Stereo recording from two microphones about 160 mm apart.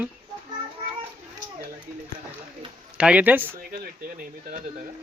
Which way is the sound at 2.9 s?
5° right (ahead or behind).